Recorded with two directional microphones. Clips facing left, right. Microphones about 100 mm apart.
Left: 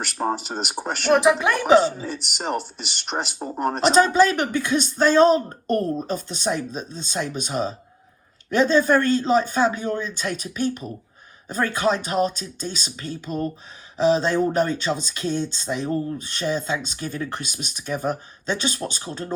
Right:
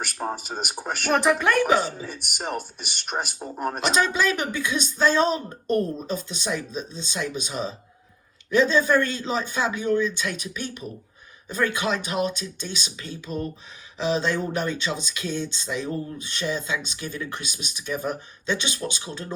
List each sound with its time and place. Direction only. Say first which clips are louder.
0.2 s speech: left 6 dB; 15° left (ahead or behind)
3.1 s speech: left 2 dB; 15° left (ahead or behind)
3.8 s speech: left 7 dB; 40° left (ahead or behind)